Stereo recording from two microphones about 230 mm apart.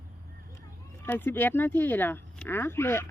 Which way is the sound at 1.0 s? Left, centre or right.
Centre.